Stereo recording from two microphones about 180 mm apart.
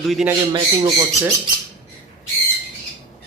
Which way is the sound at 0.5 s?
25° right (ahead or behind).